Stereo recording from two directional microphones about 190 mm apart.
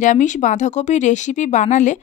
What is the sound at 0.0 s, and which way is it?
Speech, 40° left (ahead or behind).